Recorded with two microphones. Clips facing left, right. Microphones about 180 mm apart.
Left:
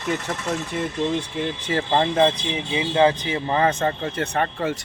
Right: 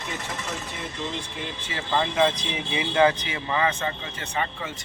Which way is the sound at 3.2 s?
40° left (ahead or behind).